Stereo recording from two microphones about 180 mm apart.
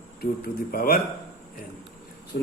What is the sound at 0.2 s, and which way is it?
Speech, 55° left (ahead or behind).